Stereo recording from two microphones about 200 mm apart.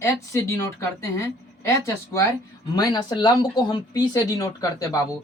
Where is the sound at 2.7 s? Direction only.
20° left (ahead or behind).